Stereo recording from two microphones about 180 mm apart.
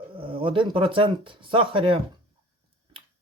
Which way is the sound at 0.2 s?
30° right (ahead or behind).